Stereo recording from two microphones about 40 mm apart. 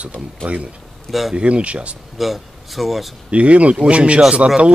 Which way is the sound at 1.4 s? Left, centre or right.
Right.